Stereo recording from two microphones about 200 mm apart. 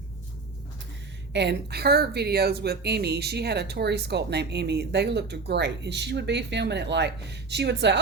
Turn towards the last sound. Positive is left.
turn(degrees=-60)  # may be behind; listen again after turning